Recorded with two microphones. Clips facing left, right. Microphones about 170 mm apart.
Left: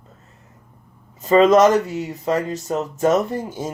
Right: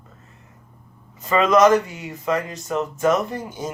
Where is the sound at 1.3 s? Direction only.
35° left (ahead or behind).